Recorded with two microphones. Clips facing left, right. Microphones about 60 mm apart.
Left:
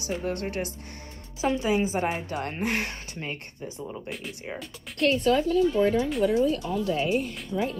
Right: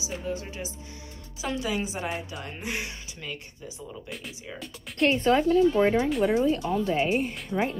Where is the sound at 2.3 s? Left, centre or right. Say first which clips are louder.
Left 6 dB; left.